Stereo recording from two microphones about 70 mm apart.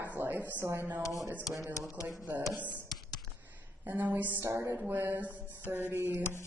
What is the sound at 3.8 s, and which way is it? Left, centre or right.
Speech, right.